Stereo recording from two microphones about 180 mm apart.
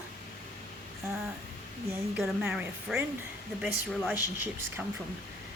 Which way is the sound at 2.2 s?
5° right (ahead or behind).